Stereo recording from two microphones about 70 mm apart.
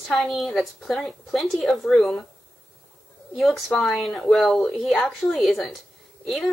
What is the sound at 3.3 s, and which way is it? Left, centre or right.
A woman's voice, centre.